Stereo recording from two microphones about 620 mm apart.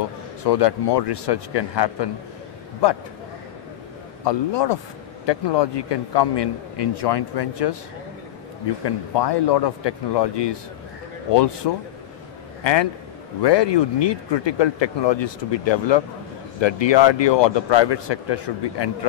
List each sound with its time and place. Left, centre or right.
0.4 s a man's voice: left
4.2 s a man's voice: left
8.8 s a man's voice: left
13.4 s speech: left